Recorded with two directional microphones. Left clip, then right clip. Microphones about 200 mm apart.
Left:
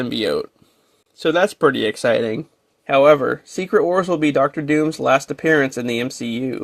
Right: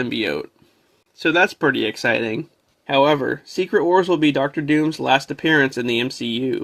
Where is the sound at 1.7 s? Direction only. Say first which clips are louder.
Left 2 dB; 30° left (ahead or behind).